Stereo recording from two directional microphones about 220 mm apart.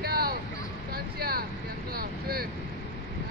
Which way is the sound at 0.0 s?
45° right (ahead or behind).